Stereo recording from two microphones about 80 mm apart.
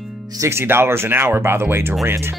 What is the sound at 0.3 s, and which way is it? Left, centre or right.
Speech, right.